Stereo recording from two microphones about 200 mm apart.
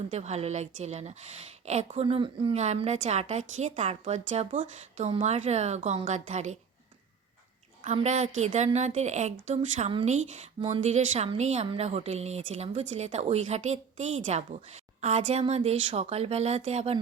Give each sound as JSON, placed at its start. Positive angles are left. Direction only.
{"t": 0.1, "sound": "a woman's voice", "side_deg": -35}
{"t": 7.9, "sound": "a woman's voice", "side_deg": -35}